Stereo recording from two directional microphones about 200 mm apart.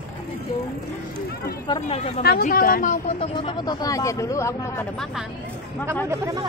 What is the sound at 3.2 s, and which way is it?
Speech, 25° left (ahead or behind).